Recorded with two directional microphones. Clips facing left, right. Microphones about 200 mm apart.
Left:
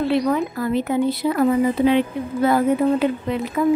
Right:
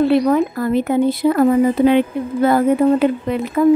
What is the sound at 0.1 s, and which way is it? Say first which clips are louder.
Speech: right 5 dB; 50° right (ahead or behind).